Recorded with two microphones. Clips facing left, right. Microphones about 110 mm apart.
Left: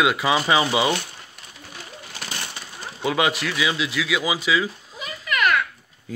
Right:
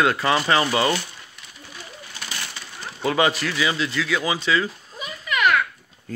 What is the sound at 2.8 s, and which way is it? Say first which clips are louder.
Speech: right 1 dB; 5° left (ahead or behind).